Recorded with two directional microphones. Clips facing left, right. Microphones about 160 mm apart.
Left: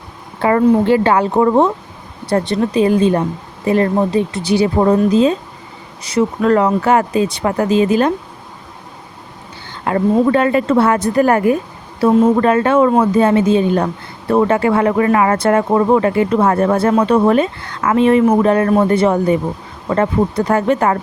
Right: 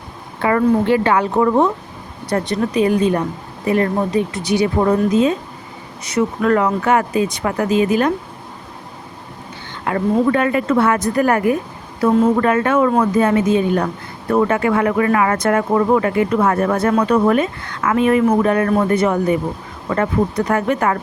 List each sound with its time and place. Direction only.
0.4 s a woman's voice: 30° left (ahead or behind)
9.8 s a woman's voice: 30° left (ahead or behind)